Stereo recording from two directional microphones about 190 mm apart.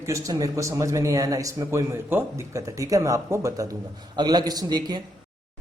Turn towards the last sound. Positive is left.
turn(degrees=-20)  # may be behind; listen again after turning